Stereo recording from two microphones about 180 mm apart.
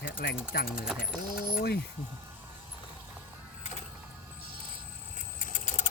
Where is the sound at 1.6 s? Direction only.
60° left (ahead or behind).